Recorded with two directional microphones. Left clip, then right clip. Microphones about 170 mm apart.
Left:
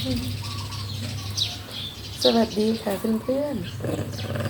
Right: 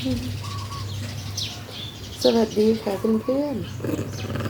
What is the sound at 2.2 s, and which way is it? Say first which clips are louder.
Speech: right 1 dB; 20° right (ahead or behind).